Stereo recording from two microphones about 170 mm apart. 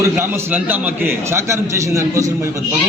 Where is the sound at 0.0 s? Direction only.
15° right (ahead or behind).